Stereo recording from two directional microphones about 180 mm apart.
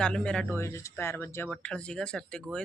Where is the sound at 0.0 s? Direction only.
5° left (ahead or behind).